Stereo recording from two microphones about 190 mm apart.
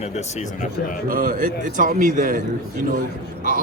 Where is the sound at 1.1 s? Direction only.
45° right (ahead or behind).